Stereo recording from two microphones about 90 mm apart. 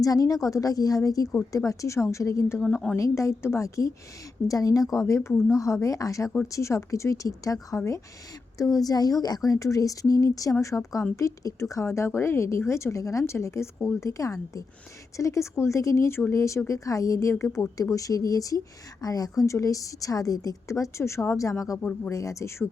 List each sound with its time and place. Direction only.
0.0 s a woman's voice: 40° left (ahead or behind)
21.8 s speech: 15° left (ahead or behind)
22.1 s a woman's voice: 35° left (ahead or behind)